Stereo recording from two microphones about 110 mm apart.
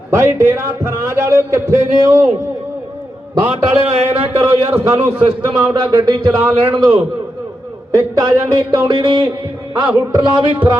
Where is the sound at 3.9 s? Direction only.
70° right (ahead or behind).